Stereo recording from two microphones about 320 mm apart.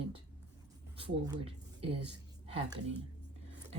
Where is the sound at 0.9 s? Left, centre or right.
Centre.